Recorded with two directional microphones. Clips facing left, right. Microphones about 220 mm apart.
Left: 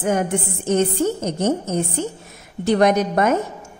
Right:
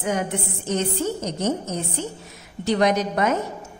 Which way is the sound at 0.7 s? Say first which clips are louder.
Left 6 dB; 50° left (ahead or behind).